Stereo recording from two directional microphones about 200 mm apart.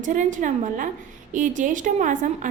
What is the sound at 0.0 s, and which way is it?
A woman's voice, 40° right (ahead or behind).